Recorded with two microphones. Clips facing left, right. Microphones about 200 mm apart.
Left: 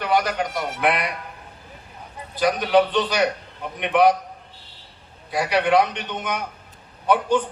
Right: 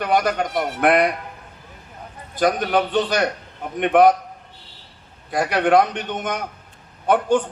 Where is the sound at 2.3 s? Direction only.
50° right (ahead or behind).